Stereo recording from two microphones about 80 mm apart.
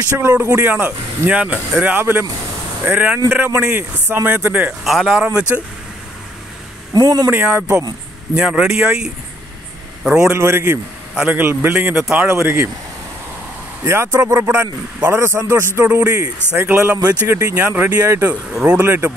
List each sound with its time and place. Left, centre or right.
0.2 s a man's voice: right
0.6 s speech: centre
4.8 s speech: centre
5.1 s a man's voice: centre
6.9 s speech: right
7.2 s a man's voice: centre
10.3 s speech: right
11.1 s a man's voice: centre
12.3 s a man's voice: right
13.8 s a man's voice: right
17.3 s a man's voice: right
17.7 s speech: right
18.0 s a man's voice: right
18.3 s speech: centre